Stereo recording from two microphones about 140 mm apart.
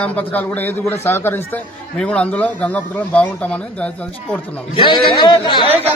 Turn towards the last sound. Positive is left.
turn(degrees=35)  # may be behind; listen again after turning